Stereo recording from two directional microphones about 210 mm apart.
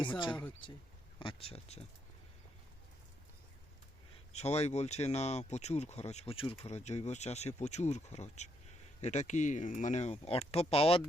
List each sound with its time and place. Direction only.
0.3 s speech: 5° left (ahead or behind)
1.2 s speech: 25° left (ahead or behind)
4.3 s speech: 30° left (ahead or behind)